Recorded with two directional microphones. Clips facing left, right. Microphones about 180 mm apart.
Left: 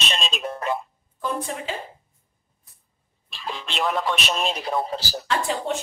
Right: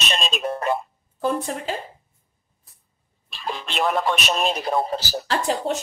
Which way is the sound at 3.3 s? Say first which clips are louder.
Right 3 dB; 50° right (ahead or behind).